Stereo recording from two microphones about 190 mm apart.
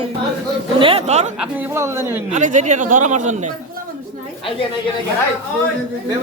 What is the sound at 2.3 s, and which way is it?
Speech, 40° right (ahead or behind).